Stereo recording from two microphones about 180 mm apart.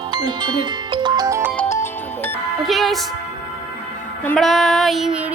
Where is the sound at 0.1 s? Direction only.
25° right (ahead or behind).